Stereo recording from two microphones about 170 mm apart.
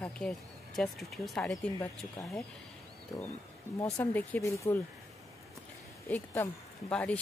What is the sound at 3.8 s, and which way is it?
Speech, 10° left (ahead or behind).